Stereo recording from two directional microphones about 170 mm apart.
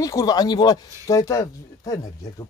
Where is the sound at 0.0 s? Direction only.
20° left (ahead or behind).